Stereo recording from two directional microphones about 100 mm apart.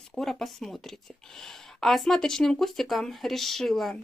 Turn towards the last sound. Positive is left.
turn(degrees=0)  # may be behind; listen again after turning